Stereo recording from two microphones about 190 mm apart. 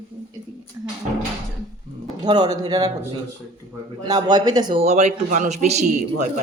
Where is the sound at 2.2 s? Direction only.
20° right (ahead or behind).